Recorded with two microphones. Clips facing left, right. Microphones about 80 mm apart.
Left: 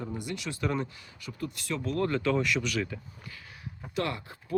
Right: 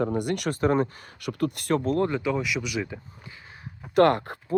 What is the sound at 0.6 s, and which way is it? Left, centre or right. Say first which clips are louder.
Speech: right 8 dB; right.